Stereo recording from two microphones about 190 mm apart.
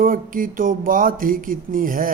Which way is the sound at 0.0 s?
45° right (ahead or behind).